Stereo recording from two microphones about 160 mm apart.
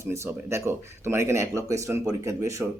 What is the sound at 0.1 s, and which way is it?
Speech, 15° right (ahead or behind).